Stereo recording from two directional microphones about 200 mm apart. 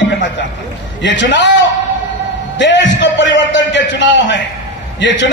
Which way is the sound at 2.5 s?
65° left (ahead or behind).